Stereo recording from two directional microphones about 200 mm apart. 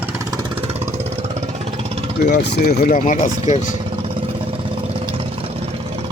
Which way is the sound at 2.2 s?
55° left (ahead or behind).